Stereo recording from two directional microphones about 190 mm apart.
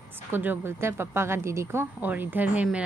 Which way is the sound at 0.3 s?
10° right (ahead or behind).